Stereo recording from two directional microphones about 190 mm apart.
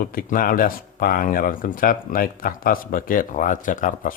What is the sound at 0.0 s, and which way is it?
Speech, 50° left (ahead or behind).